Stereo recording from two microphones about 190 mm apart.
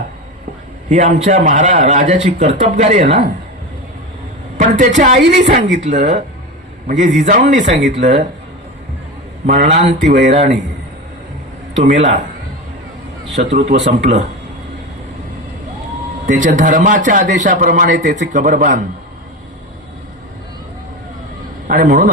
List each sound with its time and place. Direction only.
0.9 s a man's voice: 35° right (ahead or behind)
4.5 s a man's voice: 40° right (ahead or behind)
9.5 s a man's voice: 35° right (ahead or behind)
11.9 s a man's voice: 35° right (ahead or behind)
13.5 s a man's voice: 35° right (ahead or behind)
16.2 s a man's voice: 40° right (ahead or behind)
21.7 s a man's voice: 45° right (ahead or behind)